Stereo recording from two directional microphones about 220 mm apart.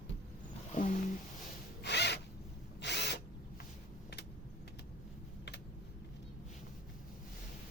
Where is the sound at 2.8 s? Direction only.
50° left (ahead or behind).